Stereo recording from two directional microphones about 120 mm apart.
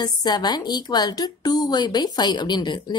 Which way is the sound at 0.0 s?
35° left (ahead or behind).